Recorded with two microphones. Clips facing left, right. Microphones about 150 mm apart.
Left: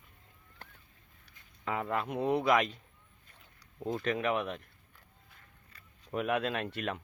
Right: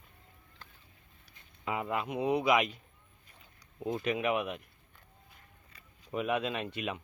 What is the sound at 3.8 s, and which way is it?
Speech, 15° right (ahead or behind).